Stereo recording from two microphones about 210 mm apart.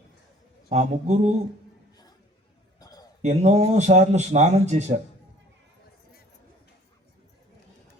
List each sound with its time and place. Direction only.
0.7 s speech: 35° right (ahead or behind)
2.7 s a sound: 20° left (ahead or behind)
3.2 s speech: 35° right (ahead or behind)